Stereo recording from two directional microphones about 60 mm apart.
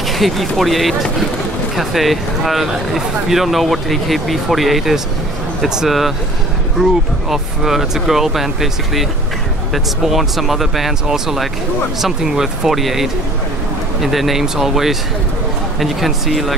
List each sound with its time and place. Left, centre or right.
0.2 s speech: centre
10.0 s speech: centre